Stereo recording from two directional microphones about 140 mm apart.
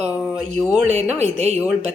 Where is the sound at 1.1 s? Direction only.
50° right (ahead or behind).